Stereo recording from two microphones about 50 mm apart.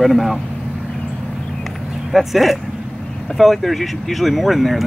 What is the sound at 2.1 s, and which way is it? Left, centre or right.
Speech, centre.